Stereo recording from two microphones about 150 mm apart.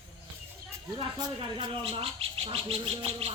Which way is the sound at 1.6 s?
40° right (ahead or behind).